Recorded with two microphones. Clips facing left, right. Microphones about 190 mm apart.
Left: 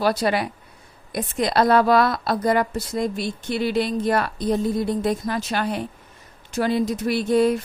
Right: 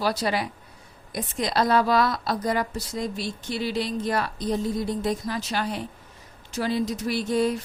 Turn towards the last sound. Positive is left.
turn(degrees=60)  # may be behind; listen again after turning